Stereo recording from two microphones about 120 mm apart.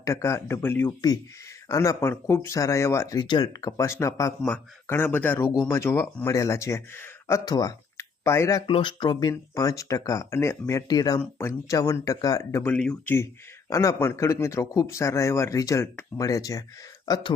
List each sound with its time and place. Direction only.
0.0 s a man's voice: 25° left (ahead or behind)
0.9 s a man's voice: 30° left (ahead or behind)
8.6 s a man's voice: 45° left (ahead or behind)
11.2 s a man's voice: 20° left (ahead or behind)